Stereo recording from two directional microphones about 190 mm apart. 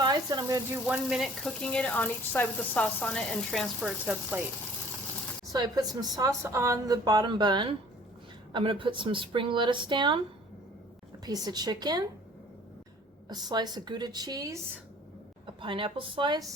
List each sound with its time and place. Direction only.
0.0 s speech: 20° right (ahead or behind)
0.9 s speech: centre (ahead or behind)
5.5 s speech: 20° right (ahead or behind)
11.3 s speech: 20° right (ahead or behind)
13.2 s speech: 20° right (ahead or behind)
15.6 s speech: 25° right (ahead or behind)